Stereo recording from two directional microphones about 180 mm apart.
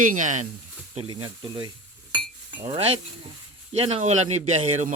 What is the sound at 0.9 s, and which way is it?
Speech, 25° right (ahead or behind).